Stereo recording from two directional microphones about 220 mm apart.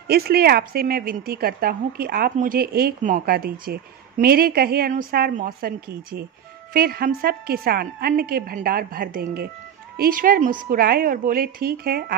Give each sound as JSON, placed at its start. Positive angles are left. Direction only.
{"t": 0.1, "sound": "a woman's voice", "side_deg": -45}